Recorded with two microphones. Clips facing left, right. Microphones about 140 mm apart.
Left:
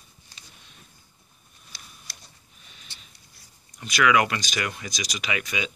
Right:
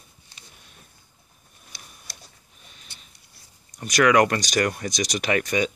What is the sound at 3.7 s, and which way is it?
Speech, 40° right (ahead or behind).